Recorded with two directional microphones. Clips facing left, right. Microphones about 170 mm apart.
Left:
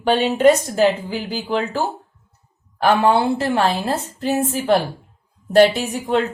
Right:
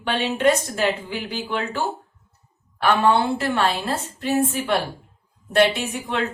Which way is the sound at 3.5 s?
40° left (ahead or behind).